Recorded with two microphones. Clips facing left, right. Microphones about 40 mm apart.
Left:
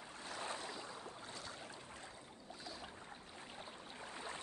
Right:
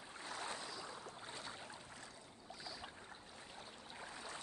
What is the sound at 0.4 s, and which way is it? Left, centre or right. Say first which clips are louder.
Boat: left 3 dB; left.